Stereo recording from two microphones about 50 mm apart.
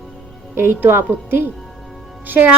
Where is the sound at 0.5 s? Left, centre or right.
Right.